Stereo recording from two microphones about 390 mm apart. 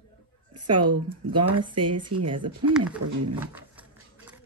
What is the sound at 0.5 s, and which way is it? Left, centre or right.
Speech, right.